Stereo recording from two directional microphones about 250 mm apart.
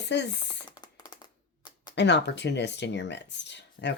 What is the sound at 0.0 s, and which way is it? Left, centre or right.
Speech, left.